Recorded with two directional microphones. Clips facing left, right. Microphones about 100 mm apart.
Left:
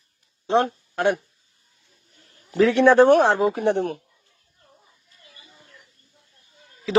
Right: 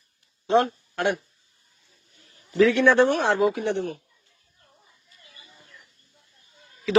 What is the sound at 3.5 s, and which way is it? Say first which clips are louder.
Speech: left 5 dB; 50° left (ahead or behind).